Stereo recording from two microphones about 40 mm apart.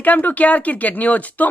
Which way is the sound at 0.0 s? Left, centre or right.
Left.